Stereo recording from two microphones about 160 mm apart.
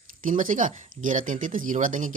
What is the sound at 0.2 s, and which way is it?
Speech, 55° right (ahead or behind).